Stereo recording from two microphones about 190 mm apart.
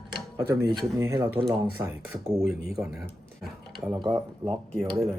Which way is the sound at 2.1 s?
Centre (ahead or behind).